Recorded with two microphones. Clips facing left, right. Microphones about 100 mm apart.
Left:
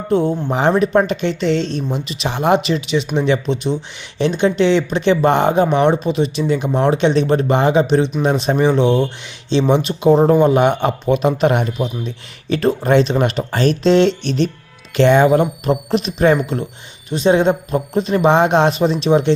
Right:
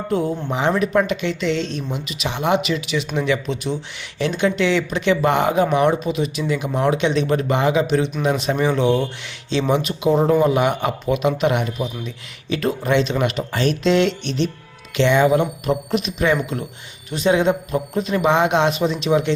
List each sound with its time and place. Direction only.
0.1 s speech: 30° left (ahead or behind)